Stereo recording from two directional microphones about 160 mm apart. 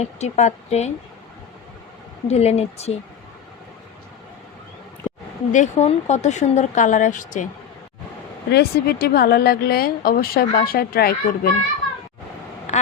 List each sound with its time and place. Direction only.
0.0 s speech: 45° left (ahead or behind)
2.2 s speech: 40° left (ahead or behind)
5.5 s speech: 50° left (ahead or behind)
8.4 s speech: 85° left
12.7 s quack: 45° left (ahead or behind)